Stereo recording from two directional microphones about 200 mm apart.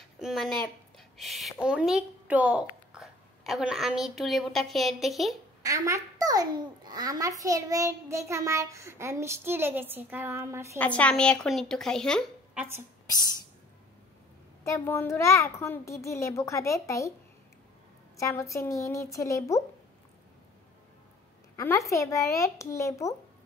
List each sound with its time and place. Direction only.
0.2 s a woman's voice: centre (ahead or behind)
5.6 s a child's voice: 15° right (ahead or behind)
10.8 s speech: 5° left (ahead or behind)
14.6 s a child's voice: 15° left (ahead or behind)
18.1 s a child's voice: 15° left (ahead or behind)
21.5 s a child's voice: 15° left (ahead or behind)